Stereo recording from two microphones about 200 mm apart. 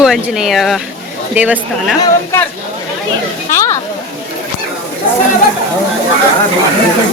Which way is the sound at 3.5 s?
15° left (ahead or behind).